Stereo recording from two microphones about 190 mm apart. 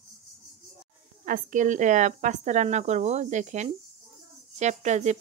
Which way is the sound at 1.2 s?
45° right (ahead or behind).